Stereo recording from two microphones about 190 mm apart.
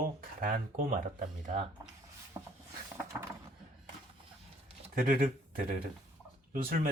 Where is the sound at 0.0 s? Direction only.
50° right (ahead or behind).